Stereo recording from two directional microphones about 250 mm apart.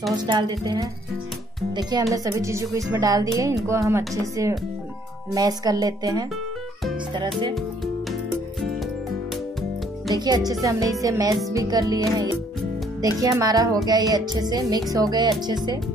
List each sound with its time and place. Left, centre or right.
0.3 s speech: centre
10.1 s speech: centre